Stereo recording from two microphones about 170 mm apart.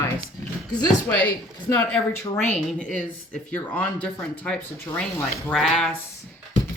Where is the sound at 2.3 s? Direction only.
5° left (ahead or behind).